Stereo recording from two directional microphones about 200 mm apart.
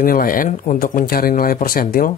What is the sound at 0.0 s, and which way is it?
Speech, 45° left (ahead or behind).